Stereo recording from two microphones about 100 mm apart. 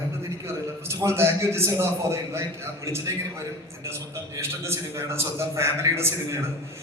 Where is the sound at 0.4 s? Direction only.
25° right (ahead or behind).